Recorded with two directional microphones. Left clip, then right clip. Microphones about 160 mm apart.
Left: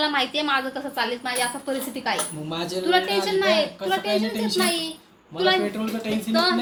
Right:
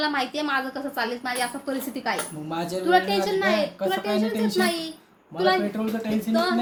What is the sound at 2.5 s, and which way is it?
Speech, 90° right.